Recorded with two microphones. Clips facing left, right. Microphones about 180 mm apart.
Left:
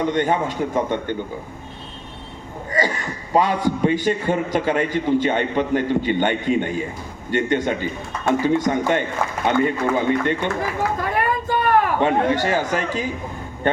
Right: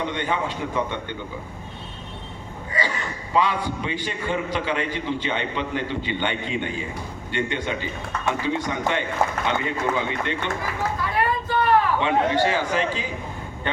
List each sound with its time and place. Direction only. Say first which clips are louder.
0.0 s a man's voice: left 6 dB; 45° left (ahead or behind)
2.8 s a man's voice: left 5 dB; 45° left (ahead or behind)
11.0 s a sound: left 2 dB; 50° left (ahead or behind)
11.6 s speech: left 2 dB; 50° left (ahead or behind)